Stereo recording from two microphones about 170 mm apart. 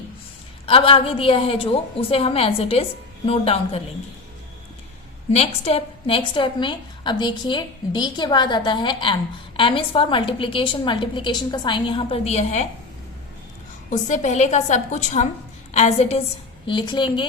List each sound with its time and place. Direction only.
0.6 s a woman's voice: 35° left (ahead or behind)
5.3 s a woman's voice: 35° left (ahead or behind)
13.9 s a woman's voice: 45° left (ahead or behind)
16.6 s a woman's voice: 30° left (ahead or behind)